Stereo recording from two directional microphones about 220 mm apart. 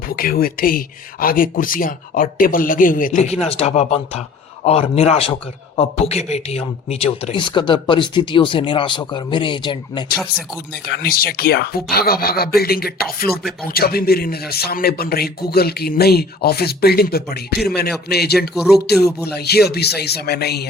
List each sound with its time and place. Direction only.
0.1 s a man's voice: 40° left (ahead or behind); by 10.1 s 20° left (ahead or behind)
10.2 s speech: 5° right (ahead or behind)
10.7 s a man's voice: 45° left (ahead or behind)
18.5 s speech: centre (ahead or behind)
18.9 s a man's voice: 45° left (ahead or behind)